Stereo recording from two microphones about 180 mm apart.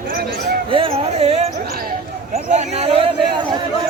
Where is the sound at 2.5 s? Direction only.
40° right (ahead or behind).